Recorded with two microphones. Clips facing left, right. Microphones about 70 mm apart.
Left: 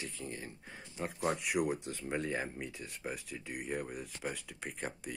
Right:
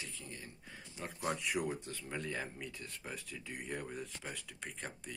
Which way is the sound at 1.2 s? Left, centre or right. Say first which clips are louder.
Left 4 dB; centre.